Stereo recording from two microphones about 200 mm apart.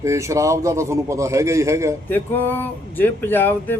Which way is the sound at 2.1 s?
10° left (ahead or behind).